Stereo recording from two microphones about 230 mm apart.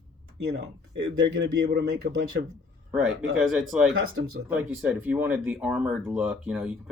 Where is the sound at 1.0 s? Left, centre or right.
Right.